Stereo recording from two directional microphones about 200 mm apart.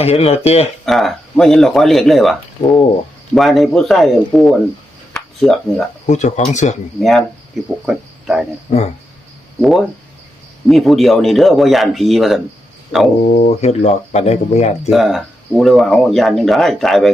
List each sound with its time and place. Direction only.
0.0 s speech: 30° left (ahead or behind)
0.9 s speech: centre (ahead or behind)
5.1 s a sound: 5° left (ahead or behind)
6.1 s speech: 35° left (ahead or behind)
7.0 s speech: centre (ahead or behind)
9.6 s speech: centre (ahead or behind)
13.3 s speech: 35° left (ahead or behind)
14.8 s speech: centre (ahead or behind)